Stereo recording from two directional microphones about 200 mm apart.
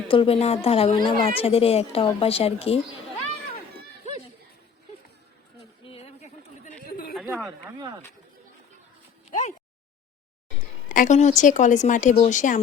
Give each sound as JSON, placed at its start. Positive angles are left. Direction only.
{"t": 0.1, "sound": "a woman's voice", "side_deg": 30}
{"t": 5.8, "sound": "a sound", "side_deg": 30}
{"t": 7.1, "sound": "a sound", "side_deg": 0}
{"t": 7.4, "sound": "speech", "side_deg": -15}
{"t": 9.3, "sound": "speech", "side_deg": 35}
{"t": 10.8, "sound": "a woman's voice", "side_deg": 40}